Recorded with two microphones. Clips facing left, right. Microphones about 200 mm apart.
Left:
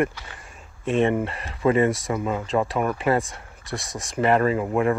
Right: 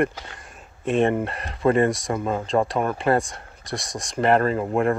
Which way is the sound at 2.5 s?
40° right (ahead or behind).